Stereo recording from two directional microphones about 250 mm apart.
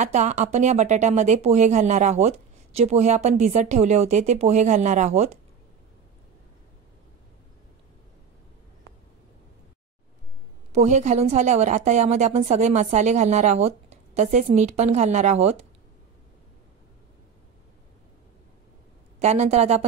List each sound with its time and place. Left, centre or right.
0.0 s speech: right
10.7 s speech: right
19.1 s speech: right